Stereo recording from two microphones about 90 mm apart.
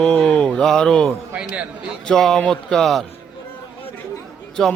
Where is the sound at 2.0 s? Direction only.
5° left (ahead or behind).